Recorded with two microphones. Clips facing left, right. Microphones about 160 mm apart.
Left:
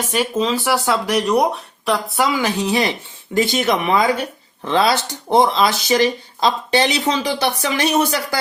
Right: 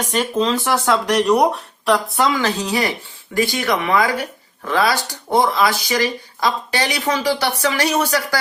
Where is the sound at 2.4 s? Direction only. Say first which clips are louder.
Left 1 dB; 15° left (ahead or behind).